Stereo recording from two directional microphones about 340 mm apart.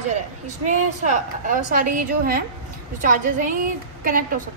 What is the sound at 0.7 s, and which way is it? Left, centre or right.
A woman's voice, right.